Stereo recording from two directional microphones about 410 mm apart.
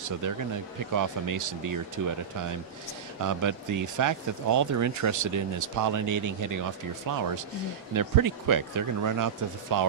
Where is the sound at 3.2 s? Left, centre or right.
Right.